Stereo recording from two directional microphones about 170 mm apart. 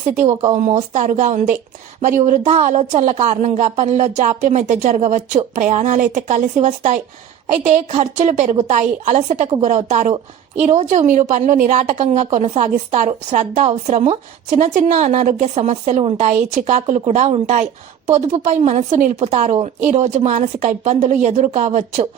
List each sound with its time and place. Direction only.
0.9 s a woman's voice: 45° right (ahead or behind)